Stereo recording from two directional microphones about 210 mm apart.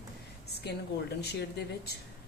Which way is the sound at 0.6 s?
50° left (ahead or behind).